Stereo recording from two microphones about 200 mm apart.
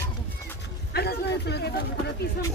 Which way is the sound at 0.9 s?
55° left (ahead or behind).